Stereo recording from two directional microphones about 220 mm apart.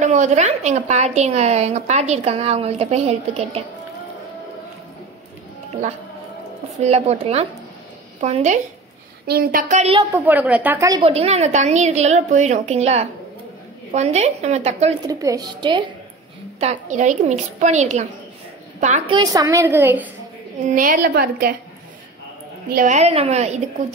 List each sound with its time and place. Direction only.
0.0 s a woman's voice: 35° right (ahead or behind)
6.8 s a woman's voice: 30° right (ahead or behind)
9.9 s a woman's voice: 10° right (ahead or behind); by 15.0 s 30° right (ahead or behind)
15.0 s a woman's voice: 15° right (ahead or behind)
16.5 s a woman's voice: 30° right (ahead or behind); by 20.1 s 10° right (ahead or behind)
20.6 s a woman's voice: 35° right (ahead or behind)
22.7 s a woman's voice: 35° right (ahead or behind)